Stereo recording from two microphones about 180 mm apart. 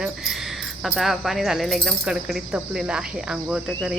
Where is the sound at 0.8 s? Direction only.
Centre (ahead or behind).